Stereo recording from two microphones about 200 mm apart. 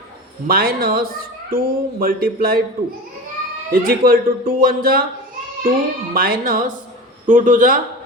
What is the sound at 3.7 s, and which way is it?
Speech, 45° right (ahead or behind).